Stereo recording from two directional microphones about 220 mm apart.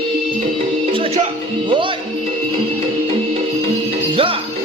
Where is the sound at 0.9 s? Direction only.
25° right (ahead or behind).